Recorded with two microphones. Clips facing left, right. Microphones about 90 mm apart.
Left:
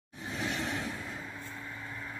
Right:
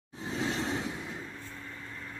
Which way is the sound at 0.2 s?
25° right (ahead or behind).